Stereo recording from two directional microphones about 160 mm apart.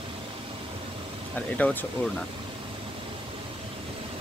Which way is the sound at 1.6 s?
10° left (ahead or behind).